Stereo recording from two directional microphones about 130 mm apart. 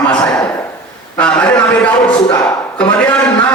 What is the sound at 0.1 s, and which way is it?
Speech, 10° left (ahead or behind).